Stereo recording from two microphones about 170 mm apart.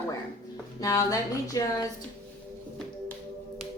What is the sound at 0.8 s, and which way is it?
Speech, 20° left (ahead or behind).